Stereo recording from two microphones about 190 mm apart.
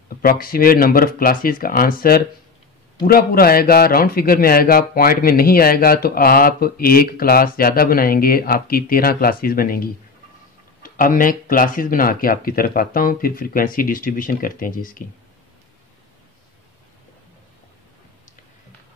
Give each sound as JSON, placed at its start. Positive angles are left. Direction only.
{"t": 0.2, "sound": "a man's voice", "side_deg": 50}